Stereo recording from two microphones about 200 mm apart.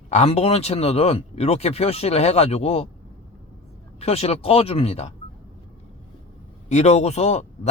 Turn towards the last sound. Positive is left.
turn(degrees=35)  # may be behind; listen again after turning